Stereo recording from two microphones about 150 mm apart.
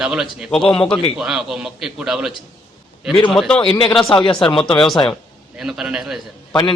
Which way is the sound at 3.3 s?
5° left (ahead or behind).